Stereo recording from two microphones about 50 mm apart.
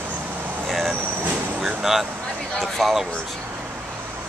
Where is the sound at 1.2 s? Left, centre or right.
Right.